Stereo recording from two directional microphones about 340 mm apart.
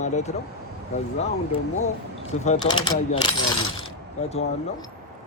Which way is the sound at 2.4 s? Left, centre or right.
Centre.